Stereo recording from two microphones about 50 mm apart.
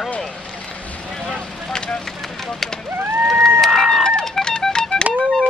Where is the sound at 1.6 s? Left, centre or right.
Centre.